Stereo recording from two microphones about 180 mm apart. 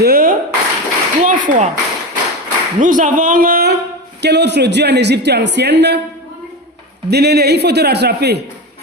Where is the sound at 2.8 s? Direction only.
45° right (ahead or behind).